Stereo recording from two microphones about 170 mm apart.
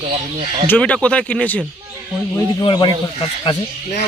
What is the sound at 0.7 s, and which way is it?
Speech, 5° left (ahead or behind).